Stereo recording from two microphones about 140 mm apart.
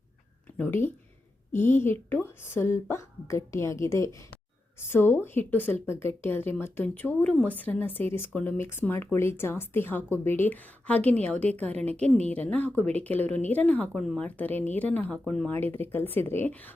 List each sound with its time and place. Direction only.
0.5 s a woman's voice: 15° left (ahead or behind)
14.3 s a woman's voice: 10° left (ahead or behind)
15.5 s a woman's voice: 15° left (ahead or behind)